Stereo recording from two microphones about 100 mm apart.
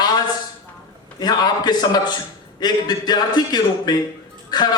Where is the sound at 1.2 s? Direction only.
45° left (ahead or behind).